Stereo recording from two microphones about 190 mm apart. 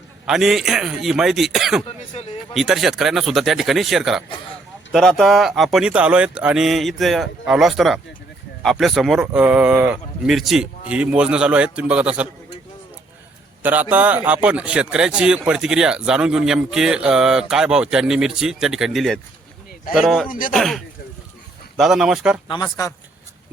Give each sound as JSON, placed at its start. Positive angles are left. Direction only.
{"t": 0.3, "sound": "a man's voice", "side_deg": 0}
{"t": 13.6, "sound": "a man's voice", "side_deg": -10}
{"t": 20.2, "sound": "speech", "side_deg": 45}
{"t": 20.5, "sound": "a man's voice", "side_deg": 0}
{"t": 22.4, "sound": "speech", "side_deg": 20}